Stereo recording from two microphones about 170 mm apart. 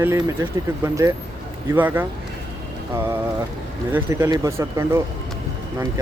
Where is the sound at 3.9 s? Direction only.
15° right (ahead or behind).